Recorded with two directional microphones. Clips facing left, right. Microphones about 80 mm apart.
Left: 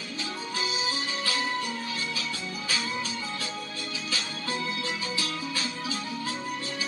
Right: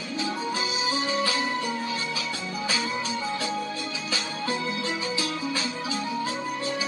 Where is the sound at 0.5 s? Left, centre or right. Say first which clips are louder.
Right 3 dB; right.